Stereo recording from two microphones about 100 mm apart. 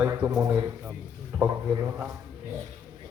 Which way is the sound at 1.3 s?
15° right (ahead or behind).